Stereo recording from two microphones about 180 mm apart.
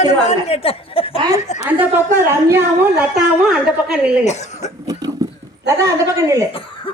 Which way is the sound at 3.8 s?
5° right (ahead or behind).